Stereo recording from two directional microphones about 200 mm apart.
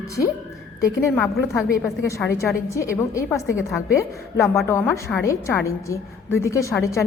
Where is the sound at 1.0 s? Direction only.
5° left (ahead or behind).